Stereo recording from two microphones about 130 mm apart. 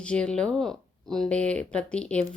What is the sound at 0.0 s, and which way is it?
Speech, 10° left (ahead or behind).